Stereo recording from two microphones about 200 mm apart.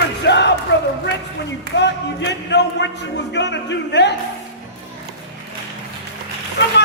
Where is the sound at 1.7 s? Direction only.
60° left (ahead or behind).